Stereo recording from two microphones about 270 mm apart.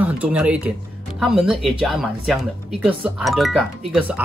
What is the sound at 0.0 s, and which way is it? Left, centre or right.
Speech, centre.